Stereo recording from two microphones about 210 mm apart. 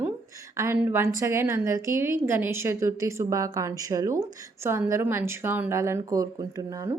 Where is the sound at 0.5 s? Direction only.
10° right (ahead or behind).